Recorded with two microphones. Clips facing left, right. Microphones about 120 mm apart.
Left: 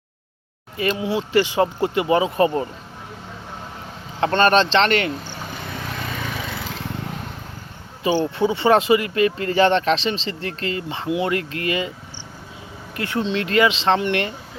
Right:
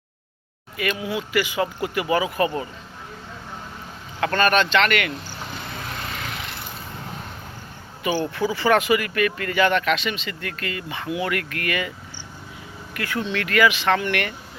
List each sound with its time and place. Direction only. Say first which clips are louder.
0.8 s speech: left 4 dB; 30° left (ahead or behind)
4.2 s speech: left 3 dB; 30° left (ahead or behind)
6.6 s vehicle: left 5 dB; 90° left
8.0 s speech: left 4 dB; 25° left (ahead or behind)
13.0 s speech: left 3 dB; 25° left (ahead or behind)